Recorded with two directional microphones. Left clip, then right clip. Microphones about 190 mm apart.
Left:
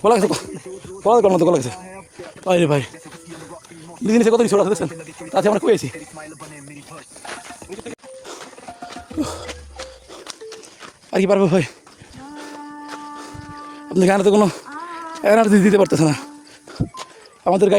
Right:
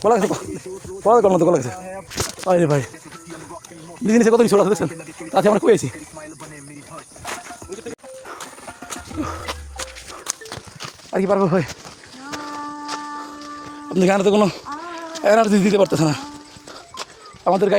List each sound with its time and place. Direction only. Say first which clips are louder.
0.0 s speech: left 1 dB; 30° left (ahead or behind)
2.6 s speech: left 1 dB; 15° left (ahead or behind)
4.0 s a man's voice: even; centre (ahead or behind)
4.4 s a man's voice: right 1 dB; 10° right (ahead or behind)
9.7 s walk: right 3 dB; 65° right (ahead or behind)
11.1 s speech: left 2 dB; 50° left (ahead or behind)
13.9 s speech: left 2 dB; 30° left (ahead or behind); by 16.2 s 50° left (ahead or behind)
17.4 s speech: left 2 dB; 45° left (ahead or behind)